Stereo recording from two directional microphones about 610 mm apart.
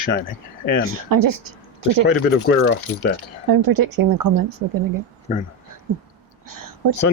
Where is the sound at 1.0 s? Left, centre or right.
Right.